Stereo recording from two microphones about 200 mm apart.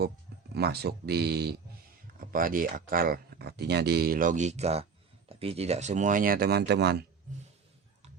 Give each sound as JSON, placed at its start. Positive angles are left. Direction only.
{"t": 0.5, "sound": "speech", "side_deg": -50}